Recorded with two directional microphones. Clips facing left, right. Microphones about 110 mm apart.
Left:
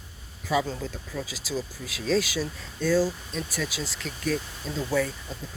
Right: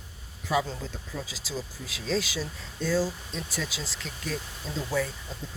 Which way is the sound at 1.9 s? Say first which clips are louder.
Left 4 dB; 20° right (ahead or behind).